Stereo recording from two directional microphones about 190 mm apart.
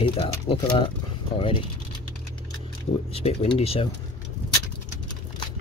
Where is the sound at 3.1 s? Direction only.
30° left (ahead or behind).